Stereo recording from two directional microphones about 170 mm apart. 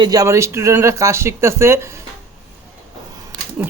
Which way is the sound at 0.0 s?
20° right (ahead or behind).